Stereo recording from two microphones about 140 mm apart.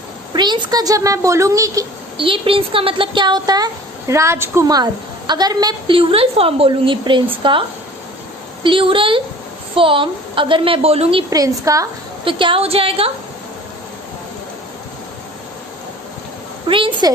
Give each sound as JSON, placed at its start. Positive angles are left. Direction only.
{"t": 0.3, "sound": "speech", "side_deg": -30}
{"t": 2.1, "sound": "a woman's voice", "side_deg": -40}
{"t": 6.0, "sound": "a woman's voice", "side_deg": -40}
{"t": 8.6, "sound": "a woman's voice", "side_deg": -40}
{"t": 11.3, "sound": "speech", "side_deg": -25}
{"t": 12.2, "sound": "a woman's voice", "side_deg": -35}
{"t": 16.6, "sound": "a woman's voice", "side_deg": -35}